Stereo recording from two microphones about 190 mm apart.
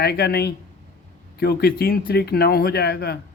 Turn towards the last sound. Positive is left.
turn(degrees=55)  # may be behind; listen again after turning